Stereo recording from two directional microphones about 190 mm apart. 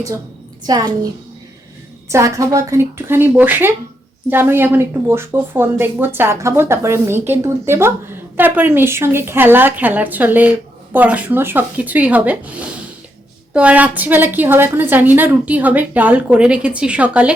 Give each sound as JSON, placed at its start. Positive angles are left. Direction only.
{"t": 0.7, "sound": "a child's voice", "side_deg": -20}
{"t": 2.0, "sound": "speech", "side_deg": -15}